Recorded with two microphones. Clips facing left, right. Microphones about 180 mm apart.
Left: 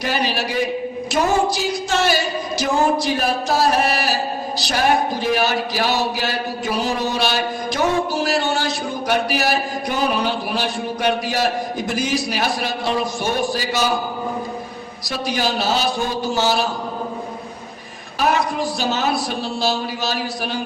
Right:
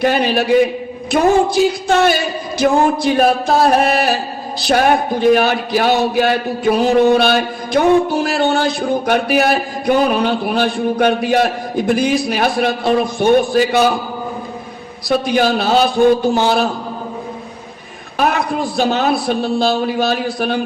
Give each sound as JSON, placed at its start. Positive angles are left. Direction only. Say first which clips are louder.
{"t": 0.0, "sound": "speech", "louder": "right 7 dB", "side_deg": -55}
{"t": 15.1, "sound": "speech", "louder": "right 8 dB", "side_deg": -55}
{"t": 18.2, "sound": "speech", "louder": "right 3 dB", "side_deg": -55}